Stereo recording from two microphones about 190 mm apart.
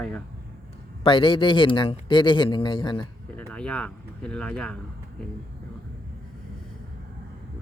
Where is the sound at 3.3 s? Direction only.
5° left (ahead or behind).